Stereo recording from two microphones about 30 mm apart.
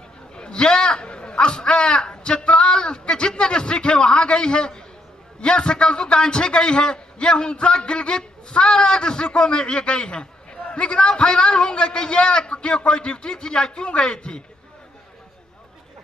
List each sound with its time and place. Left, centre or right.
0.4 s a man's voice: left